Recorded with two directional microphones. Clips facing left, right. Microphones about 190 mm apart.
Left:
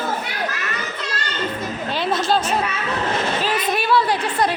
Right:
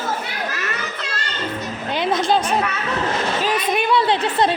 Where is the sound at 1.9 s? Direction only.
20° right (ahead or behind).